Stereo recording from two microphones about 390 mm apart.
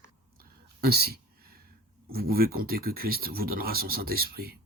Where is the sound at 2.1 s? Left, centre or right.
Right.